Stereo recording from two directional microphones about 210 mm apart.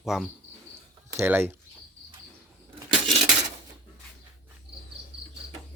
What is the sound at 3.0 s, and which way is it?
Dishes, centre (ahead or behind).